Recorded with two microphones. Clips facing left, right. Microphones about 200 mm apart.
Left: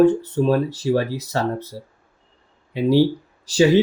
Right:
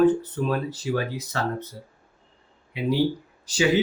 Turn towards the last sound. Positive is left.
turn(degrees=35)  # may be behind; listen again after turning